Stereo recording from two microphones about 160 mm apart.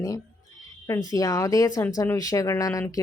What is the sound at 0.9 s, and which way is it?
Speech, 20° left (ahead or behind).